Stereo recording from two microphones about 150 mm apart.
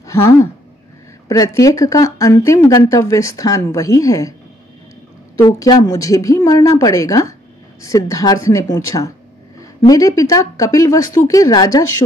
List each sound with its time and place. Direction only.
0.0 s speech: 20° left (ahead or behind)
5.4 s speech: 25° left (ahead or behind)